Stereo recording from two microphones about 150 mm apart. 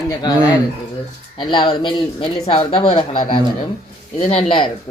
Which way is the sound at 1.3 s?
30° left (ahead or behind).